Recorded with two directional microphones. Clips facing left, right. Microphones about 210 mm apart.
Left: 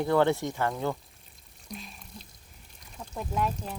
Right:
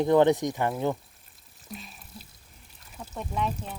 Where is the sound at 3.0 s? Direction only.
Centre (ahead or behind).